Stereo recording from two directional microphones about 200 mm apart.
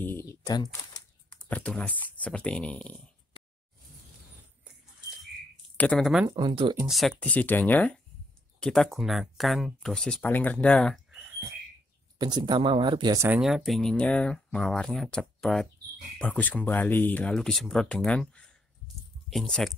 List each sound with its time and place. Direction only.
0.0 s a sound: 10° left (ahead or behind)
1.5 s speech: 5° left (ahead or behind)
5.8 s speech: 5° left (ahead or behind)
6.2 s speech: 20° right (ahead or behind)
6.9 s speech: centre (ahead or behind)
12.2 s speech: 20° right (ahead or behind)
13.4 s speech: centre (ahead or behind)